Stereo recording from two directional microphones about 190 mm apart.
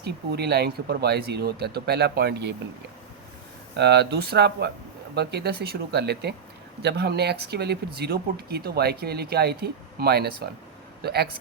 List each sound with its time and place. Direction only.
0.0 s speech: 60° right (ahead or behind)
3.8 s speech: 60° right (ahead or behind)